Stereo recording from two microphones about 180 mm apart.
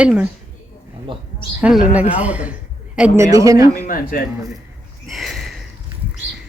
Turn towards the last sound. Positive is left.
turn(degrees=0)  # may be behind; listen again after turning